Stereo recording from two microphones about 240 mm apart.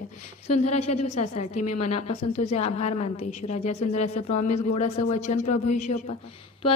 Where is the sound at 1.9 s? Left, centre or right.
Left.